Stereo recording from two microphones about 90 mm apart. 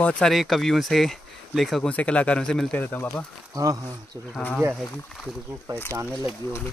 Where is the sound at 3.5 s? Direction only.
40° right (ahead or behind).